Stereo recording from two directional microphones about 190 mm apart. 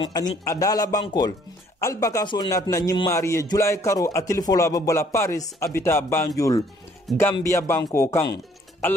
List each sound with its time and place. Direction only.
0.0 s a man's voice: 20° left (ahead or behind)
7.1 s speech: centre (ahead or behind)
7.4 s a man's voice: 15° left (ahead or behind)